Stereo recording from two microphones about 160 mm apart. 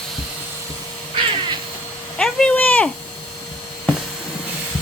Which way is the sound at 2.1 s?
5° left (ahead or behind).